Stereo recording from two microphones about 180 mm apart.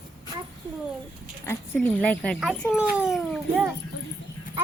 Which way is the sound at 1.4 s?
10° left (ahead or behind).